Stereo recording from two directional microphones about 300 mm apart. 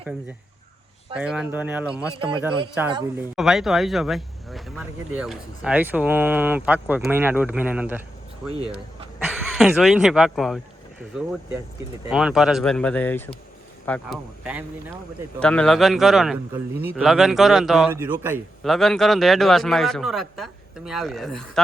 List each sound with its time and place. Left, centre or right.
1.1 s a man's voice: centre
2.3 s a man's voice: centre
3.3 s a man's voice: centre
9.6 s a man's voice: centre
12.1 s a man's voice: centre